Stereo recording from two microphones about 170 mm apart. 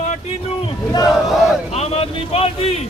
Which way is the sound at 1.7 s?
35° left (ahead or behind).